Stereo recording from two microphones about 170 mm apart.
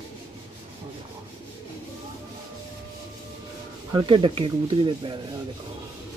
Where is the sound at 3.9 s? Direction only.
30° right (ahead or behind).